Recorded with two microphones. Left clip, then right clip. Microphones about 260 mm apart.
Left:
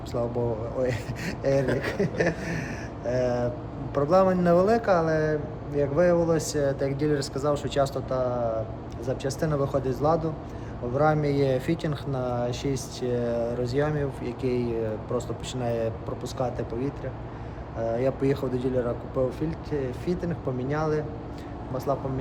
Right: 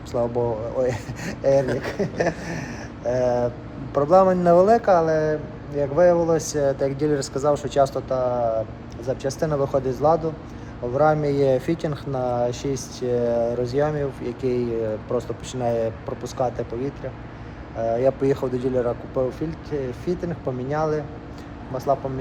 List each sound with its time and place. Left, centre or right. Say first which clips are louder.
0.1 s speech: right 5 dB; centre